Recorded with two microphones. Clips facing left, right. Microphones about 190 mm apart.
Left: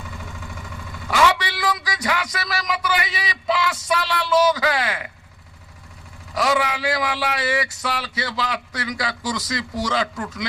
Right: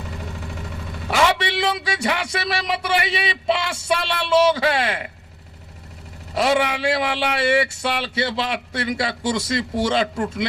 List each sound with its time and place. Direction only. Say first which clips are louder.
0.0 s vehicle: right 4 dB; 35° right (ahead or behind)
6.3 s a man's voice: right 2 dB; 25° right (ahead or behind)